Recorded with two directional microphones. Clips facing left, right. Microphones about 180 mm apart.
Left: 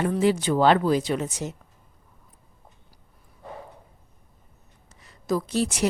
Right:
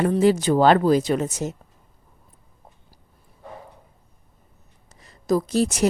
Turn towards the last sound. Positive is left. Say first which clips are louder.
# right 4 dB
turn(degrees=-40)  # may be behind; listen again after turning